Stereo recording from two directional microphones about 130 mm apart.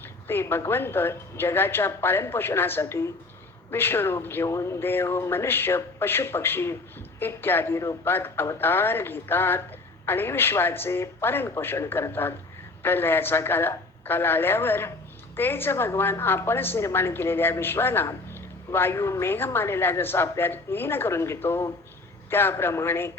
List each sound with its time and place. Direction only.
0.0 s a woman's voice: 15° left (ahead or behind)